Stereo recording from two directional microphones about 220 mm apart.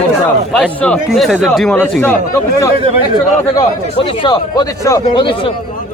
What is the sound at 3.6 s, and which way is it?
Speech, 20° left (ahead or behind).